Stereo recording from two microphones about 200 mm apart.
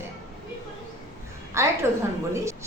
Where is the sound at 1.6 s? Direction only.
15° right (ahead or behind).